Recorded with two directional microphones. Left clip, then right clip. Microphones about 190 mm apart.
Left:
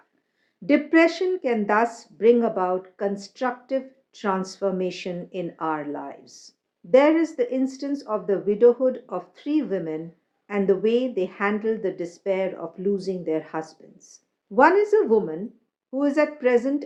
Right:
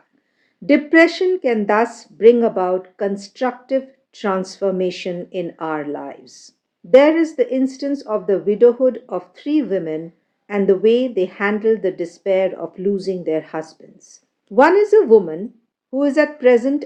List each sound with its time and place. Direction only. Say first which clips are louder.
0.6 s speech: right 6 dB; 35° right (ahead or behind)